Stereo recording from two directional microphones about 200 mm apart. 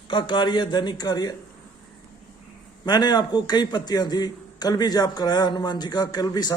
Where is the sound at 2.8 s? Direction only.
20° left (ahead or behind).